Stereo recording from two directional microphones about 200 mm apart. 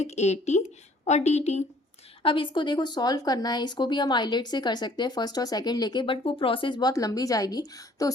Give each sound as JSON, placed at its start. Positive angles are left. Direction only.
{"t": 0.0, "sound": "speech", "side_deg": 35}